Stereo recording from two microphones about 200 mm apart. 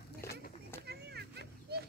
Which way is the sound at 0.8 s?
55° right (ahead or behind).